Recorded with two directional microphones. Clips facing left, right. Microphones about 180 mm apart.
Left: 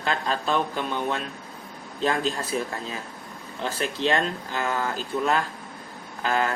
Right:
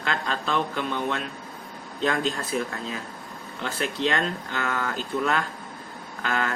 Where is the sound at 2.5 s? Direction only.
35° left (ahead or behind).